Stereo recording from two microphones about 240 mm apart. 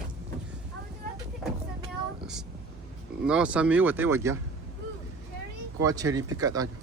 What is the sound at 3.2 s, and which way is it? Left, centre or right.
Speech, centre.